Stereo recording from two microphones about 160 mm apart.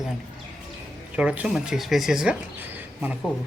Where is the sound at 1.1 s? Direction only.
5° right (ahead or behind).